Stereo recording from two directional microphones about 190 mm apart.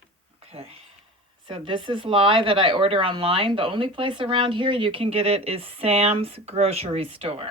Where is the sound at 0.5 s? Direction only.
30° right (ahead or behind).